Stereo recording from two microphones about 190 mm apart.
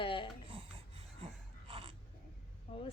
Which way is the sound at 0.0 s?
25° left (ahead or behind).